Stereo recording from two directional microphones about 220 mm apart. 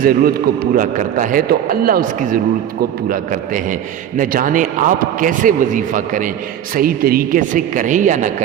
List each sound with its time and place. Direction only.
0.0 s a man's voice: 45° right (ahead or behind)